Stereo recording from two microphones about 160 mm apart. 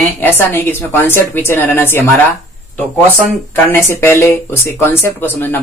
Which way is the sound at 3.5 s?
15° left (ahead or behind).